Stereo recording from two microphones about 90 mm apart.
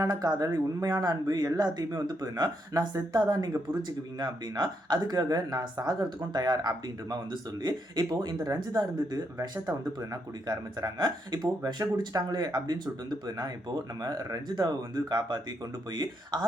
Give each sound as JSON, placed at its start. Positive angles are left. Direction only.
{"t": 0.0, "sound": "speech", "side_deg": -45}